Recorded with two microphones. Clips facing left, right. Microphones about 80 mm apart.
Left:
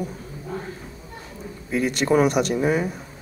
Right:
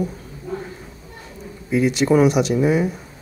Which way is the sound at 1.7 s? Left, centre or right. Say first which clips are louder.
Right 4 dB; left.